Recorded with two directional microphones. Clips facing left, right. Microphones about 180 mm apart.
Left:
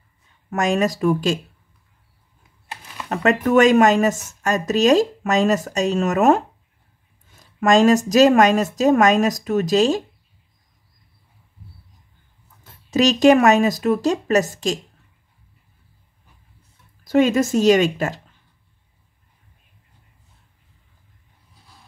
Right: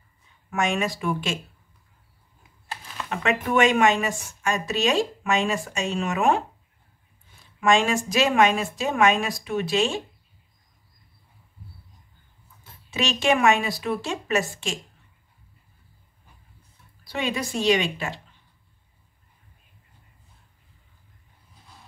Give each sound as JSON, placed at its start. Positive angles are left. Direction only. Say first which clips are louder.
{"t": 0.5, "sound": "speech", "louder": "left 6 dB", "side_deg": 40}
{"t": 3.1, "sound": "speech", "louder": "left 7 dB", "side_deg": 40}
{"t": 12.9, "sound": "speech", "louder": "left 9 dB", "side_deg": 40}
{"t": 17.0, "sound": "speech", "louder": "left 12 dB", "side_deg": 45}